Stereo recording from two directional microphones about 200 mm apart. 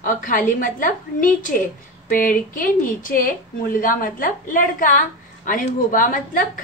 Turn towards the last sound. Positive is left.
turn(degrees=40)  # may be behind; listen again after turning